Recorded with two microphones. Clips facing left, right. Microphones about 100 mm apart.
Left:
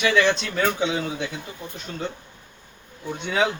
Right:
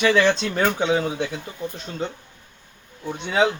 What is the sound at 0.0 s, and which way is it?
Speech, 35° right (ahead or behind).